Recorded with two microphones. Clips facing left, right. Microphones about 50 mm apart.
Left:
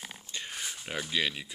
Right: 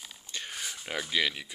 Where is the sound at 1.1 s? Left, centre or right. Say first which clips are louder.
Right 2 dB; right.